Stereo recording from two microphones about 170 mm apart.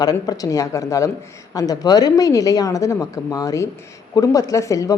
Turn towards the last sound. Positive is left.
turn(degrees=20)  # may be behind; listen again after turning